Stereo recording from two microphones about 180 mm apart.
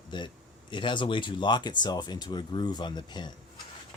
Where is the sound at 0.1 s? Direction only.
25° left (ahead or behind).